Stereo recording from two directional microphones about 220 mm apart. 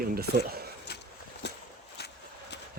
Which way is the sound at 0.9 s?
45° left (ahead or behind).